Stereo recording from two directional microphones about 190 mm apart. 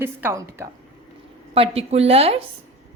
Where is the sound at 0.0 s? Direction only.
10° right (ahead or behind).